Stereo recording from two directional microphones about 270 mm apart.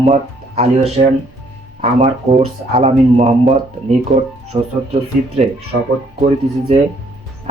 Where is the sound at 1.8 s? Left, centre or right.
Right.